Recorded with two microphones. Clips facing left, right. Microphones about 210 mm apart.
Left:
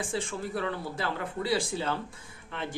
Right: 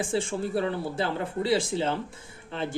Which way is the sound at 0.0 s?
30° right (ahead or behind).